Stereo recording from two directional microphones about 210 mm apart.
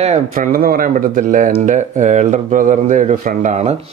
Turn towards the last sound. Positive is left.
turn(degrees=-35)  # may be behind; listen again after turning